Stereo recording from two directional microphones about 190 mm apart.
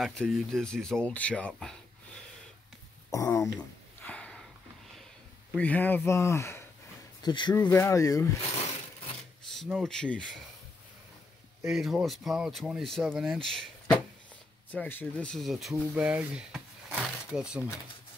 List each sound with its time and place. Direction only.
0.0 s speech: centre (ahead or behind)
3.1 s speech: 15° left (ahead or behind)
4.0 s a sound: 5° left (ahead or behind)
5.5 s speech: 10° left (ahead or behind)
9.5 s speech: centre (ahead or behind)
11.6 s speech: centre (ahead or behind)